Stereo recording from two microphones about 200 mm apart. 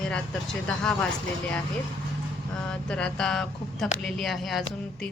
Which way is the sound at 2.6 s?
5° left (ahead or behind).